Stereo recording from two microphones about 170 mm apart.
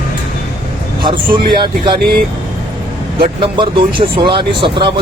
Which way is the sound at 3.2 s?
30° right (ahead or behind).